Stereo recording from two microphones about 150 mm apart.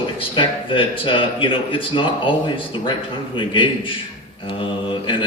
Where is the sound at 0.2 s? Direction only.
35° left (ahead or behind).